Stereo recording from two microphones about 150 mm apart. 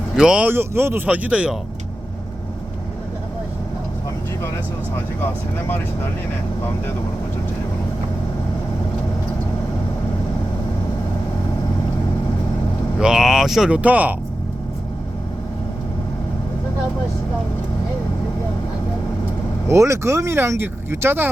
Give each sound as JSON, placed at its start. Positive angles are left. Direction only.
{"t": 0.2, "sound": "speech", "side_deg": -5}
{"t": 5.2, "sound": "speech", "side_deg": 15}
{"t": 13.0, "sound": "speech", "side_deg": -5}
{"t": 19.6, "sound": "speech", "side_deg": -20}